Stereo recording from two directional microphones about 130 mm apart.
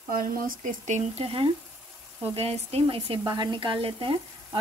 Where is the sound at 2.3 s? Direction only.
50° right (ahead or behind).